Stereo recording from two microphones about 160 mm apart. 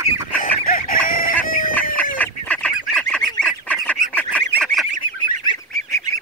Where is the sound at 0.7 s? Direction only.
60° left (ahead or behind).